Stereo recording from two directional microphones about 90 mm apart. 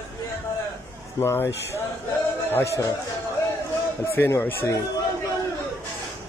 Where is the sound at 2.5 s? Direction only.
30° left (ahead or behind).